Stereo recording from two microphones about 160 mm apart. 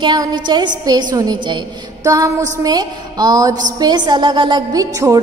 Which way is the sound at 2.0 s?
20° right (ahead or behind).